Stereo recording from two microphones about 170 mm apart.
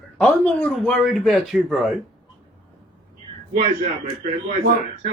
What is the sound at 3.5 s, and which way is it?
Speech, 50° right (ahead or behind).